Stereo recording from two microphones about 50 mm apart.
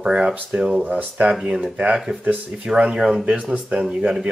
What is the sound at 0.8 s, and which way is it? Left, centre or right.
Speech, right.